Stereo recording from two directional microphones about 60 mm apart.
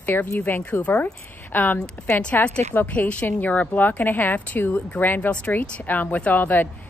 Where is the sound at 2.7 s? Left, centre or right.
Left.